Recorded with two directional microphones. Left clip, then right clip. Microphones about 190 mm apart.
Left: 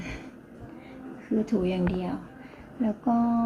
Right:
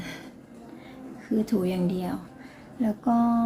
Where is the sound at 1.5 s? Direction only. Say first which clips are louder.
Even; 15° right (ahead or behind).